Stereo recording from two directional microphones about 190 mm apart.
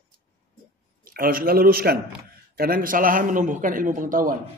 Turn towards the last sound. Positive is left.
turn(degrees=-45)  # may be behind; listen again after turning